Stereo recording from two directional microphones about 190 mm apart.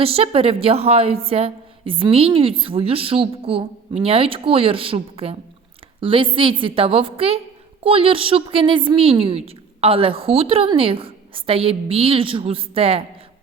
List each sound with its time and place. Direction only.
0.0 s a woman's voice: 30° right (ahead or behind)